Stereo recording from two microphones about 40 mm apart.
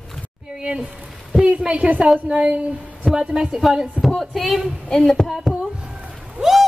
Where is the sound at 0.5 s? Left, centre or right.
Right.